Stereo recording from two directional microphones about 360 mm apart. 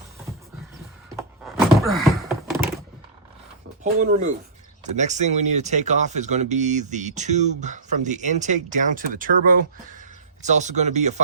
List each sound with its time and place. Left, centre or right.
1.1 s door: centre
4.0 s speech: right